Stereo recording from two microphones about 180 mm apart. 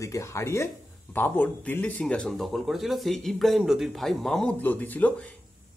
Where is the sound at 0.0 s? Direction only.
15° left (ahead or behind).